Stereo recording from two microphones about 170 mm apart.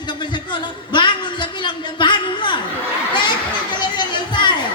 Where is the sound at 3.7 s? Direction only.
25° left (ahead or behind).